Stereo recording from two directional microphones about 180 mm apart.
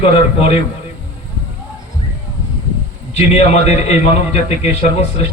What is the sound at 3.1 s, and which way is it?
A man's voice, 35° left (ahead or behind).